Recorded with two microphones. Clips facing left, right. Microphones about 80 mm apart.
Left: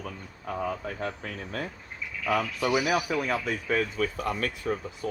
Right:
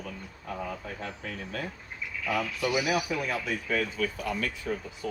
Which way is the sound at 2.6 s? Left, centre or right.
Left.